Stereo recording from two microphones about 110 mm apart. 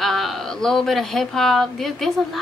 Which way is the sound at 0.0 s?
5° left (ahead or behind).